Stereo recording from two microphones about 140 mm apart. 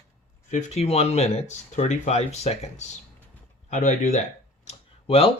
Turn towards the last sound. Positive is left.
turn(degrees=45)  # may be behind; listen again after turning